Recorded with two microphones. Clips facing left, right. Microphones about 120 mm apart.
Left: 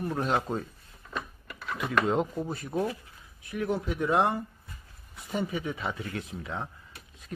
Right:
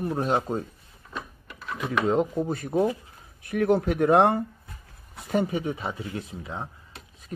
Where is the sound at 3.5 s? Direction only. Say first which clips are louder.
Right 8 dB; 60° right (ahead or behind).